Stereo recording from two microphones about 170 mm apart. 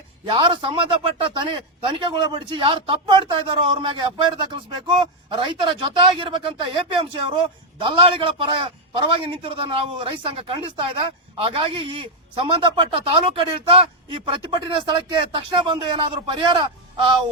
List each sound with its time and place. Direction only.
0.3 s speech: 30° right (ahead or behind)